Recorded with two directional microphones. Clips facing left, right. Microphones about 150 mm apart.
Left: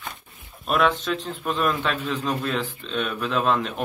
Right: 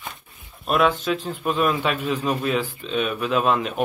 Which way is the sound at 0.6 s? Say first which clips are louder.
Right 2 dB; 5° right (ahead or behind).